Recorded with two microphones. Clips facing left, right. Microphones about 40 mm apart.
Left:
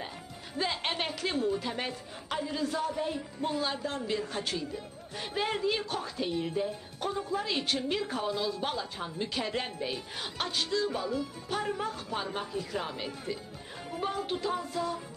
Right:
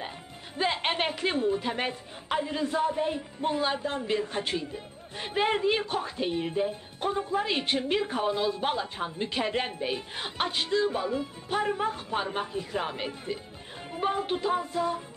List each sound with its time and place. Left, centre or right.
0.6 s a woman's voice: right